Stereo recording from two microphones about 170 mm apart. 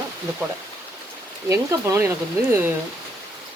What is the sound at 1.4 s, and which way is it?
Speech, 20° right (ahead or behind).